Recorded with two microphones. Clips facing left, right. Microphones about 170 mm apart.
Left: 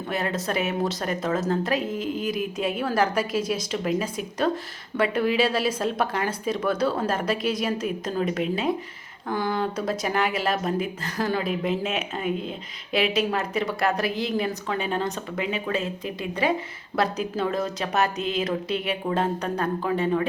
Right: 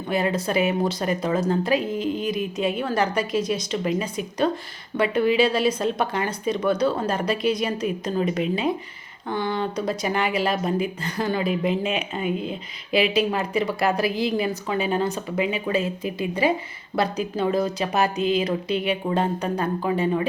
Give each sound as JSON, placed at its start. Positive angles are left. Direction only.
{"t": 0.1, "sound": "speech", "side_deg": 0}